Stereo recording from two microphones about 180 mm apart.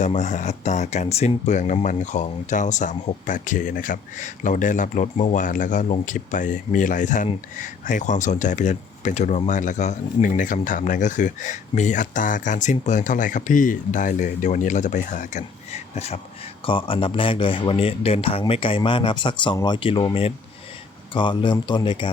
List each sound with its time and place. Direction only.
0.0 s speech: 40° left (ahead or behind)
21.1 s speech: 25° left (ahead or behind)